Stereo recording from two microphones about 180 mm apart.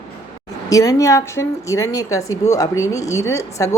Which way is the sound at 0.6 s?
20° left (ahead or behind).